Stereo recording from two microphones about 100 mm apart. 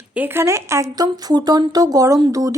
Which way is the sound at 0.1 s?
20° right (ahead or behind).